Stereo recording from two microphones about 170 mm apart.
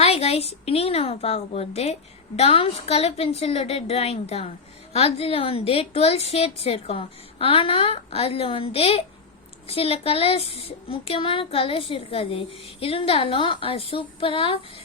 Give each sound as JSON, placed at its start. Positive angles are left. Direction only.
{"t": 0.0, "sound": "a woman's voice", "side_deg": 35}